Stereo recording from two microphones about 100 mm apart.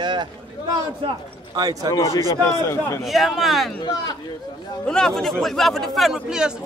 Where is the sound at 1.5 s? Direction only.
40° right (ahead or behind).